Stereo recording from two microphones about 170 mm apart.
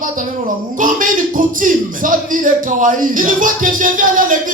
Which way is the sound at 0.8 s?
50° right (ahead or behind).